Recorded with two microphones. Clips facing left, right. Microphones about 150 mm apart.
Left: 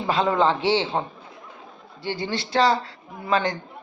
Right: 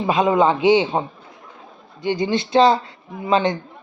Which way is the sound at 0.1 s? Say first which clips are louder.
Right 4 dB; 15° right (ahead or behind).